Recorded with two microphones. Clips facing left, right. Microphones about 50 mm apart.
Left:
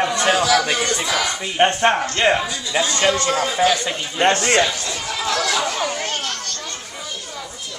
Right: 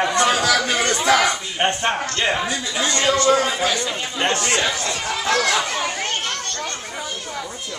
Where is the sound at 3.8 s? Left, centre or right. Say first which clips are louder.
Left 4 dB; left.